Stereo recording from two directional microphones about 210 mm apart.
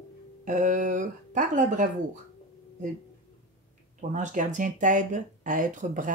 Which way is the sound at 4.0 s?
35° right (ahead or behind).